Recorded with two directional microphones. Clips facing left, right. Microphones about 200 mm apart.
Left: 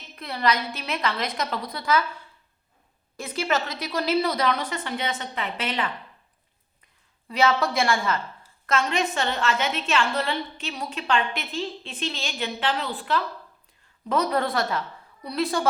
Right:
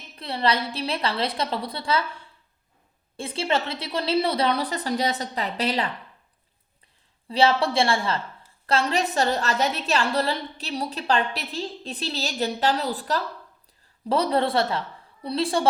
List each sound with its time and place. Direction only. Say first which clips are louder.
0.2 s a woman's voice: right 1 dB; 30° right (ahead or behind)
7.3 s a woman's voice: right 2 dB; 30° right (ahead or behind)